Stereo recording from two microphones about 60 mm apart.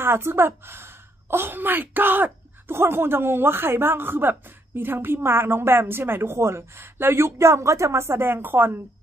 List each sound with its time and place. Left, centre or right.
0.0 s a woman's voice: right